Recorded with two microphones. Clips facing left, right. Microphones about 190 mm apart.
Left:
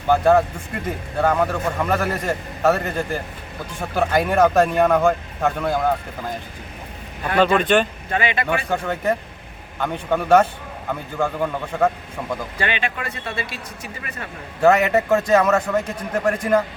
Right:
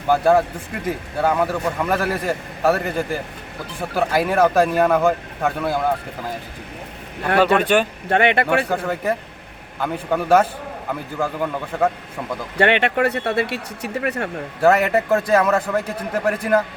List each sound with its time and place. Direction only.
0.1 s speech: 5° right (ahead or behind)
7.3 s speech: 10° right (ahead or behind)
8.1 s speech: 65° right (ahead or behind)
8.7 s speech: 5° right (ahead or behind)
12.5 s speech: 65° right (ahead or behind)
14.6 s speech: centre (ahead or behind)